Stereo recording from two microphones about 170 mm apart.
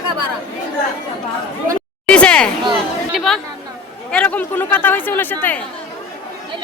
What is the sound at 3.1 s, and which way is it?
Speech, centre (ahead or behind).